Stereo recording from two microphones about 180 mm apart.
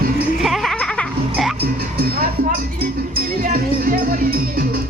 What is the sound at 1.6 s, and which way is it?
Music, 55° right (ahead or behind).